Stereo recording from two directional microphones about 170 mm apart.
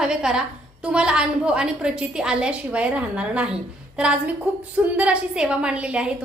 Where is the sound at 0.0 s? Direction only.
5° right (ahead or behind).